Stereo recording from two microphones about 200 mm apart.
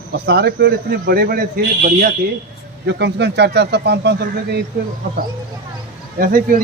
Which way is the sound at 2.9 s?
60° right (ahead or behind).